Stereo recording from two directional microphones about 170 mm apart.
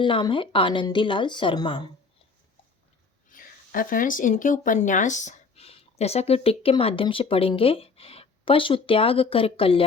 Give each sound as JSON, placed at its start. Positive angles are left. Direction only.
{"t": 0.0, "sound": "a woman's voice", "side_deg": 30}
{"t": 3.2, "sound": "speech", "side_deg": 55}